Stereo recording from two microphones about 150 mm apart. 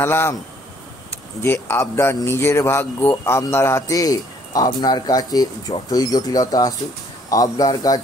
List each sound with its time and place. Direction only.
0.0 s speech: 15° left (ahead or behind)
1.4 s speech: 15° left (ahead or behind)